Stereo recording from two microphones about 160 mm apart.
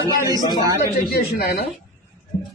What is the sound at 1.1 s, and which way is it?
Speech, 70° left (ahead or behind).